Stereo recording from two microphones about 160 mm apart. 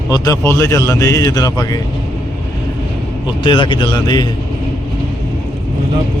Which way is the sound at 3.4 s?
30° left (ahead or behind).